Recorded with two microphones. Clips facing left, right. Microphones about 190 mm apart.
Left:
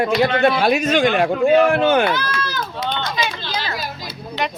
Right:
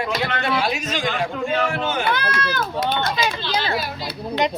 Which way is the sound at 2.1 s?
55° right (ahead or behind).